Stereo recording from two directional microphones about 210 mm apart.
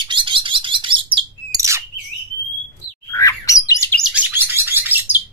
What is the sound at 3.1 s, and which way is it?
Bird, 15° left (ahead or behind).